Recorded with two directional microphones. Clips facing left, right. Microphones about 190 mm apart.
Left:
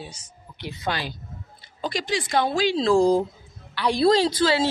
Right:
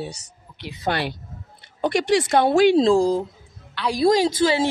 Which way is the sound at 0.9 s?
65° right (ahead or behind).